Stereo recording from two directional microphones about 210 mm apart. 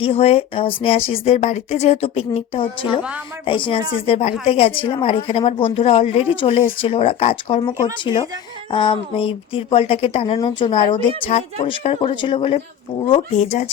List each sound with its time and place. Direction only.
0.0 s speech: 30° left (ahead or behind)